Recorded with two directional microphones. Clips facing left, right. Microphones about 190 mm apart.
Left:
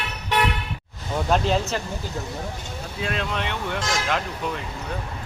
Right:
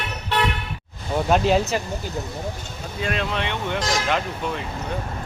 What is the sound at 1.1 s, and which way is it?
Speech, 5° right (ahead or behind).